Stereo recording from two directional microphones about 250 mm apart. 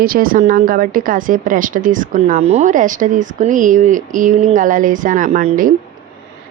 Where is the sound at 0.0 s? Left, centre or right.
Right.